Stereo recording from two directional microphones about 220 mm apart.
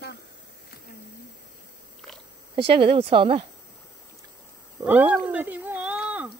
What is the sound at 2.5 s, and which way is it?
Speech, 25° right (ahead or behind).